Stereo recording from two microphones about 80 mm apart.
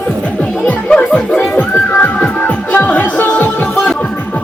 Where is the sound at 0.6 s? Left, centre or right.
Centre.